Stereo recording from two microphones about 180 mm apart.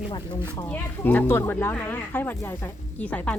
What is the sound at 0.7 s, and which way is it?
Speech, 10° left (ahead or behind).